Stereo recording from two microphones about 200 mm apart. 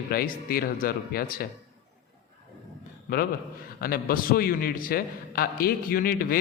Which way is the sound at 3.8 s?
50° left (ahead or behind).